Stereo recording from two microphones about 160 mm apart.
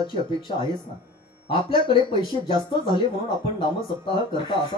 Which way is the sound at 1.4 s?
30° left (ahead or behind).